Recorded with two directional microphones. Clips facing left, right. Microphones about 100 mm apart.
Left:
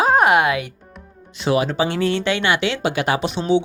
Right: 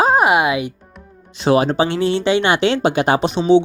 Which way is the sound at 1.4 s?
35° right (ahead or behind).